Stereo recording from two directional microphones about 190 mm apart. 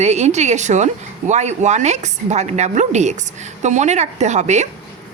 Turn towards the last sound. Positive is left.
turn(degrees=-35)  # may be behind; listen again after turning